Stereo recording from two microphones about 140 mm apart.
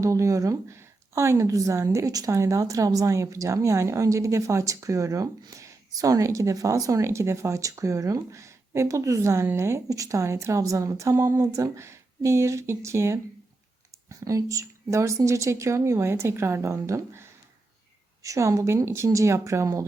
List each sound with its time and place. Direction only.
0.0 s a woman's voice: 20° right (ahead or behind)